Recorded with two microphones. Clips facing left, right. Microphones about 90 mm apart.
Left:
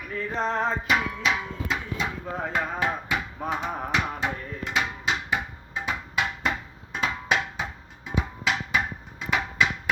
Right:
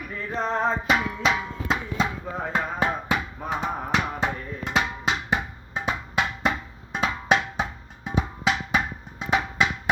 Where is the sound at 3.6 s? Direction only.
35° right (ahead or behind).